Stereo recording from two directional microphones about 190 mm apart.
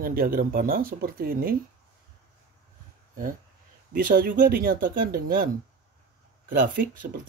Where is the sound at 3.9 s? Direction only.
50° right (ahead or behind).